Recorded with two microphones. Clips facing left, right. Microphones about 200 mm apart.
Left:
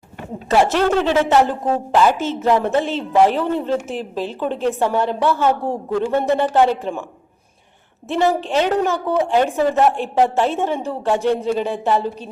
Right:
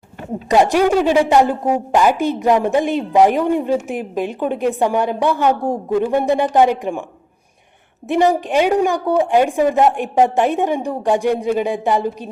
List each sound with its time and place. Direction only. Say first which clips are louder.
0.4 s a woman's voice: right 2 dB; 15° right (ahead or behind)
8.0 s a woman's voice: right 3 dB; 15° right (ahead or behind)